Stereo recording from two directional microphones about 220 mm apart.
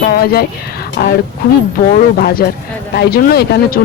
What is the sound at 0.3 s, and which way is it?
Speech, 45° left (ahead or behind).